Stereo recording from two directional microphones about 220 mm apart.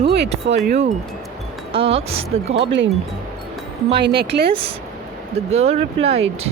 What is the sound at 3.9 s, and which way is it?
Speech, 45° right (ahead or behind).